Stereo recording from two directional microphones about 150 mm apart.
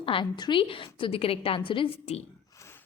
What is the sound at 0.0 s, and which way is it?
A woman's voice, 35° left (ahead or behind).